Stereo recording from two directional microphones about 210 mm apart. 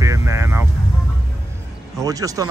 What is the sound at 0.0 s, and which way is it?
Vehicle, 15° right (ahead or behind).